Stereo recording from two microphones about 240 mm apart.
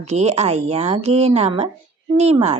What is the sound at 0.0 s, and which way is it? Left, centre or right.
Speech, right.